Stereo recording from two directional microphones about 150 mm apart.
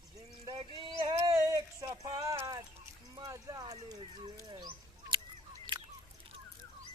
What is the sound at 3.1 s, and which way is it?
Livestock, 25° right (ahead or behind).